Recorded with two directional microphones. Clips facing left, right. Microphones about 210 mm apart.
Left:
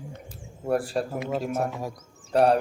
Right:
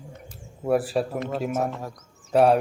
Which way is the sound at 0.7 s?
5° right (ahead or behind).